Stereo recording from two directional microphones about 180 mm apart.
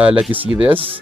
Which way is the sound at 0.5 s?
30° right (ahead or behind).